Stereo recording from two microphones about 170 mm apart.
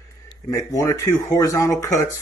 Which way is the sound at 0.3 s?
20° left (ahead or behind).